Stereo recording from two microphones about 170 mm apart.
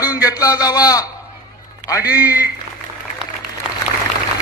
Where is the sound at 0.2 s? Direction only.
20° left (ahead or behind).